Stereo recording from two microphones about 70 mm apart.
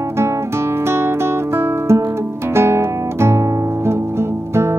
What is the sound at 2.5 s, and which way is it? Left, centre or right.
Guitar, right.